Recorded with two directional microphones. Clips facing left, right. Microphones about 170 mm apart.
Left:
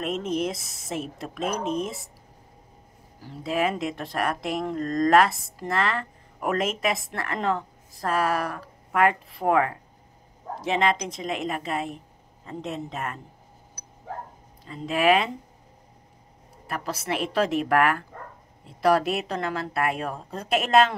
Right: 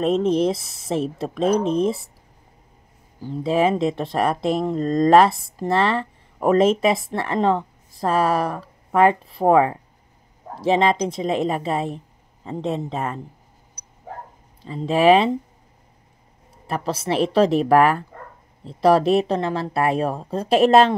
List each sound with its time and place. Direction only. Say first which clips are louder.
0.0 s speech: right 8 dB; 30° right (ahead or behind)
3.2 s speech: right 7 dB; 30° right (ahead or behind)
14.7 s speech: right 6 dB; 30° right (ahead or behind)
16.6 s speech: right 6 dB; 30° right (ahead or behind)